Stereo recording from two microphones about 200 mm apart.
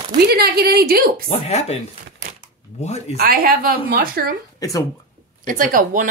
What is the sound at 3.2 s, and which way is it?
A woman's voice, 45° right (ahead or behind).